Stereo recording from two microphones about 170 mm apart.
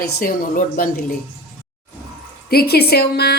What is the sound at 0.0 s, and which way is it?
A woman's voice, 60° left (ahead or behind).